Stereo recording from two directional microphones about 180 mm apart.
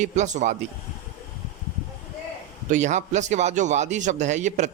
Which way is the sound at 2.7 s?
40° right (ahead or behind).